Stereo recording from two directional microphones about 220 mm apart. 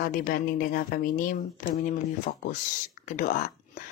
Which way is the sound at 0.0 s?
40° left (ahead or behind).